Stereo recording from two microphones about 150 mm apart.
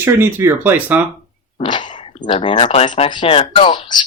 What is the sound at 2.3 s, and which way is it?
Speech, 30° left (ahead or behind).